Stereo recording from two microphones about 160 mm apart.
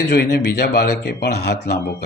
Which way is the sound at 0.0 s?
90° left.